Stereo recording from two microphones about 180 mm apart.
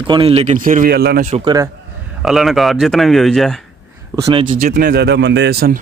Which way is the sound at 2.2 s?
Centre (ahead or behind).